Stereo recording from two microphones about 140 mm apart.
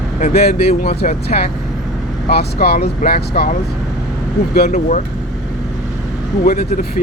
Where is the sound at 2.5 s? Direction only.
90° left.